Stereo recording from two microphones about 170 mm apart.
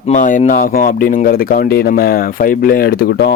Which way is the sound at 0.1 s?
50° left (ahead or behind).